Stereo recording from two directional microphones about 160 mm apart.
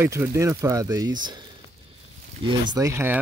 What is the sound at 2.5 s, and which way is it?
Speech, 25° right (ahead or behind).